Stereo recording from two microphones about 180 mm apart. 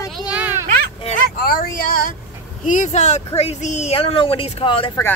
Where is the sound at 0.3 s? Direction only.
10° right (ahead or behind).